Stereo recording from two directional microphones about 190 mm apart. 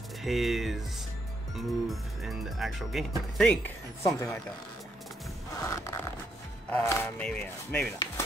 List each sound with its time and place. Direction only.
0.2 s speech: centre (ahead or behind)
4.0 s wood: 15° left (ahead or behind)
5.6 s wood: 15° left (ahead or behind)